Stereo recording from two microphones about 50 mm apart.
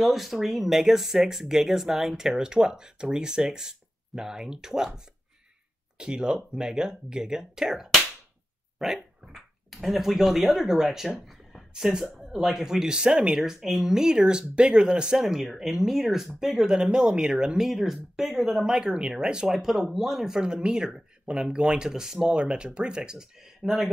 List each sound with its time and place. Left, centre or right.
0.0 s speech: centre
11.1 s a sound: centre
11.7 s speech: centre
13.4 s speech: centre
19.5 s speech: centre